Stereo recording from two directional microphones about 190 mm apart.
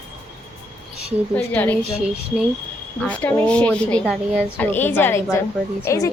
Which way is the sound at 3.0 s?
5° left (ahead or behind).